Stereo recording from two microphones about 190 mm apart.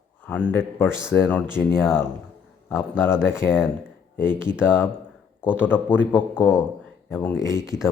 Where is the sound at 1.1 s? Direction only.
10° left (ahead or behind).